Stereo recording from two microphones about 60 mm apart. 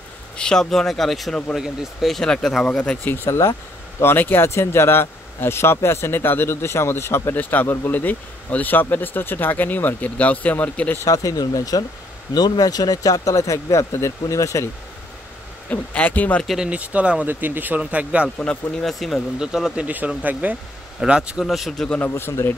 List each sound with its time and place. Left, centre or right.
0.4 s speech: centre
2.7 s speech: centre
3.3 s speech: left
4.0 s speech: left
11.1 s speech: left
15.7 s speech: left
16.6 s speech: right
17.3 s speech: right
18.8 s speech: centre
19.4 s speech: centre
19.7 s speech: right
21.0 s speech: centre
21.5 s speech: centre
22.0 s speech: left